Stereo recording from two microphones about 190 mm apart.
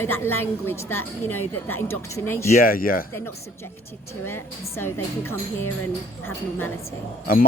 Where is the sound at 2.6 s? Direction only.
50° left (ahead or behind).